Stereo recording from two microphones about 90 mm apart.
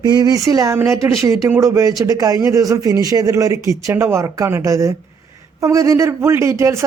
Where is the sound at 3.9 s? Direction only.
25° right (ahead or behind).